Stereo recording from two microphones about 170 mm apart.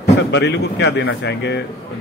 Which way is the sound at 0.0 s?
85° left.